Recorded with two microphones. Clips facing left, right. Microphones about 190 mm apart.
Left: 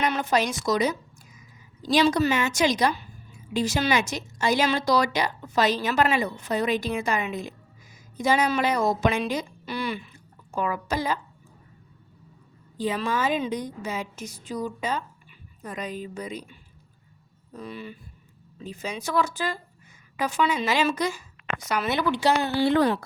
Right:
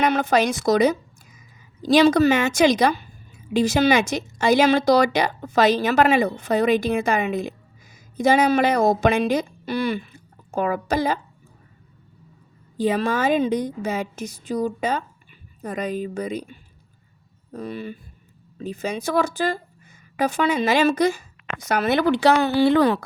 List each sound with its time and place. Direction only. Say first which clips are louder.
0.0 s speech: right 5 dB; 65° right (ahead or behind)
12.7 s speech: right 5 dB; 55° right (ahead or behind)
14.5 s a woman's voice: right 6 dB; 45° right (ahead or behind); by 22.9 s 90° right